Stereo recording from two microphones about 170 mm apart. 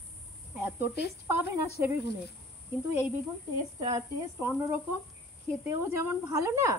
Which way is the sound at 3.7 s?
25° right (ahead or behind).